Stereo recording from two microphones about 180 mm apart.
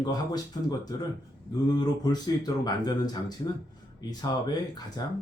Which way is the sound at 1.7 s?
20° left (ahead or behind).